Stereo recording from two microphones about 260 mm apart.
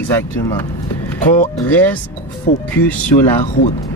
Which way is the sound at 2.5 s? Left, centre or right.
Left.